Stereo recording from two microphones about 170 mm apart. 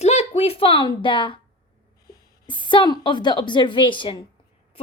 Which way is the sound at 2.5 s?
30° left (ahead or behind).